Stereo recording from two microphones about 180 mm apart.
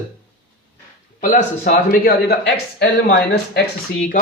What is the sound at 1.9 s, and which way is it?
Speech, 60° left (ahead or behind).